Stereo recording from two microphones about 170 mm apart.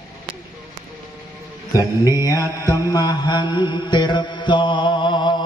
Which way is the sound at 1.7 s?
20° left (ahead or behind).